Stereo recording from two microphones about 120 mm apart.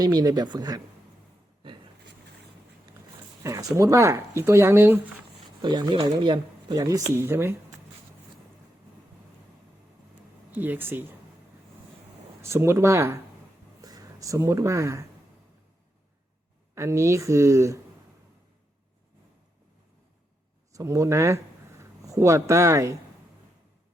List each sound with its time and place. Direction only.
0.0 s speech: 30° right (ahead or behind)
3.4 s speech: 25° right (ahead or behind)
5.6 s speech: 40° right (ahead or behind)
6.7 s speech: 30° right (ahead or behind)
10.5 s speech: 15° right (ahead or behind)
12.4 s speech: 20° right (ahead or behind)
16.7 s speech: 25° right (ahead or behind)
20.7 s speech: 30° right (ahead or behind)